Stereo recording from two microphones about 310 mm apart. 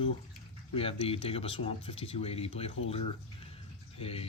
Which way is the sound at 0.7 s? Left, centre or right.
Centre.